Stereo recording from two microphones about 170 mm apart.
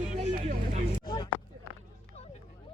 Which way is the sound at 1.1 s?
25° left (ahead or behind).